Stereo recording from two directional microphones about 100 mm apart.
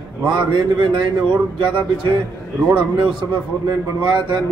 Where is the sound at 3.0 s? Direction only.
50° right (ahead or behind).